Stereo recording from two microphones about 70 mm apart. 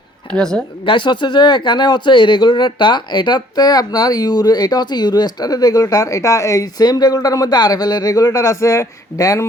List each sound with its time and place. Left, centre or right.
0.3 s a woman's voice: centre
1.0 s speech: left
6.7 s speech: left